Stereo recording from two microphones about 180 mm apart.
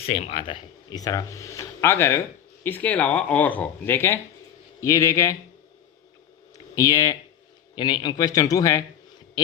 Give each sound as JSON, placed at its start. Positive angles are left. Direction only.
{"t": 0.0, "sound": "speech", "side_deg": 35}
{"t": 6.7, "sound": "speech", "side_deg": 20}